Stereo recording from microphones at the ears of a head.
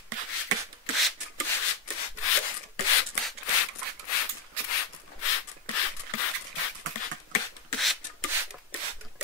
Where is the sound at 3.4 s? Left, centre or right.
Left.